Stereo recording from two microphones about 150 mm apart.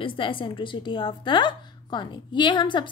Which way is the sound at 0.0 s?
35° left (ahead or behind).